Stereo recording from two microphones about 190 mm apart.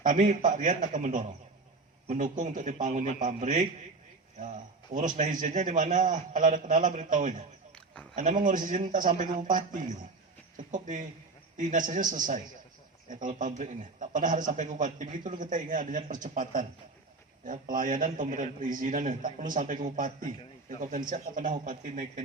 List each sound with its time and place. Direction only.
0.0 s a man's voice: 45° right (ahead or behind)